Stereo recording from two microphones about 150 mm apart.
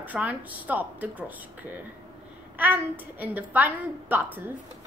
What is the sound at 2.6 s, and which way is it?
A woman's voice, 10° right (ahead or behind).